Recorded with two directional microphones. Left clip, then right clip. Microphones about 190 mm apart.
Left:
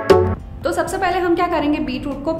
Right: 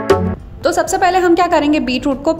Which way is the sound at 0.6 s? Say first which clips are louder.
Right 6 dB; 35° right (ahead or behind).